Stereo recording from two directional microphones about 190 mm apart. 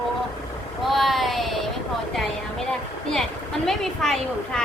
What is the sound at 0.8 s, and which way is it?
Speech, centre (ahead or behind).